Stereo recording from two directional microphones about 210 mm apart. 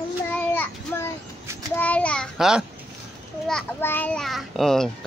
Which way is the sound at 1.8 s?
5° left (ahead or behind).